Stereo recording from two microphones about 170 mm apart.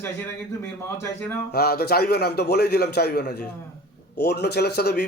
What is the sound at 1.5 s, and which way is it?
A man's voice, 70° left (ahead or behind).